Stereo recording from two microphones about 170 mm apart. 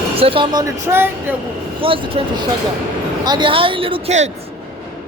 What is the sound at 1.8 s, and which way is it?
Speech, 30° right (ahead or behind).